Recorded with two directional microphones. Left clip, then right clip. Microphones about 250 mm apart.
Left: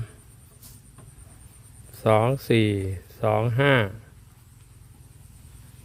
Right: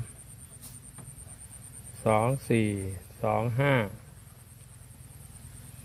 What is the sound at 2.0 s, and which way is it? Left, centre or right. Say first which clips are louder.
Speech: left 5 dB; left.